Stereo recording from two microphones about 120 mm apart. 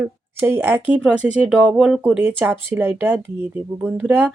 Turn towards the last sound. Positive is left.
turn(degrees=-15)  # may be behind; listen again after turning